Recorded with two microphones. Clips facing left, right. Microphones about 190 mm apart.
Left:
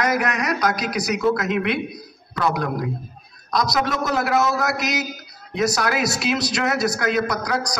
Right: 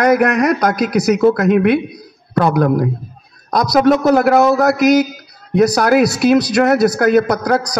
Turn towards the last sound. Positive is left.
turn(degrees=-60)  # may be behind; listen again after turning